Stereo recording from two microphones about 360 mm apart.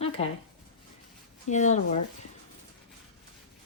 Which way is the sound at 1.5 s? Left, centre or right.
Centre.